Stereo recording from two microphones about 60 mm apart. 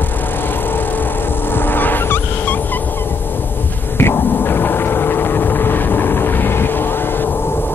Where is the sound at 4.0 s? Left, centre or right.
Left.